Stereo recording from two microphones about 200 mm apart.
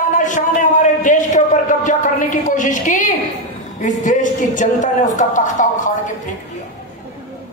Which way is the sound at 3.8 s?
40° left (ahead or behind).